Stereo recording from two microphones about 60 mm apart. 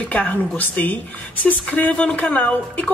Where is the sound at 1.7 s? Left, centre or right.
Centre.